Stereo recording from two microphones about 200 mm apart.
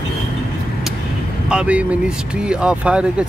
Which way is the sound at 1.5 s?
5° right (ahead or behind).